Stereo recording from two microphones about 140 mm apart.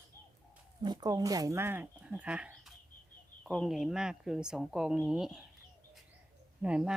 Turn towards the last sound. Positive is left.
turn(degrees=-5)  # may be behind; listen again after turning